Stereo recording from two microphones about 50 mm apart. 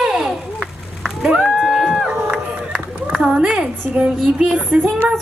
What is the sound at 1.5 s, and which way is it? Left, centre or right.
Run, centre.